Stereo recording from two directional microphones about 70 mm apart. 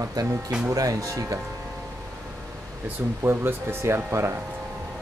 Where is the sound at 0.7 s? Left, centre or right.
Right.